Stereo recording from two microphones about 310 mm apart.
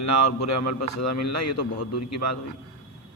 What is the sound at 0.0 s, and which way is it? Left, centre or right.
A man's voice, left.